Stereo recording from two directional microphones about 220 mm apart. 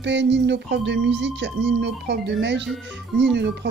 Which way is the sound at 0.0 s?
55° right (ahead or behind).